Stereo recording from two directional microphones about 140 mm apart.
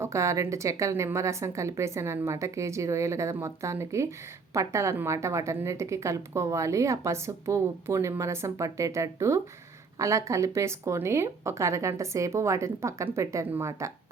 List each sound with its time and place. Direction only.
0.0 s a woman's voice: 20° right (ahead or behind)